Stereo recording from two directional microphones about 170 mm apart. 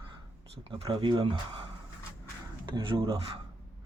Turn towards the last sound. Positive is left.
turn(degrees=-30)  # may be behind; listen again after turning